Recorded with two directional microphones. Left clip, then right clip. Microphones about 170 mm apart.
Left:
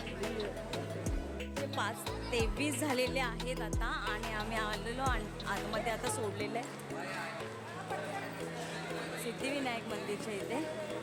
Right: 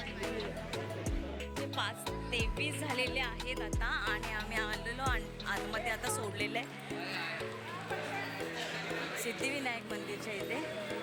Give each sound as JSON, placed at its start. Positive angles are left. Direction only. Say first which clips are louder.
{"t": 2.3, "sound": "music", "louder": "left 2 dB", "side_deg": 20}
{"t": 3.9, "sound": "speech", "louder": "right 3 dB", "side_deg": 0}
{"t": 9.4, "sound": "speech", "louder": "left 2 dB", "side_deg": 0}